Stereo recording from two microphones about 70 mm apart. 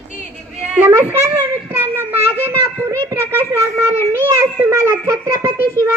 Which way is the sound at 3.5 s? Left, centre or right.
Right.